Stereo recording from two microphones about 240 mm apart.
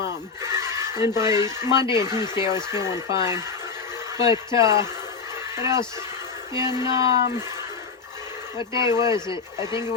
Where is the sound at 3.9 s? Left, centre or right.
Centre.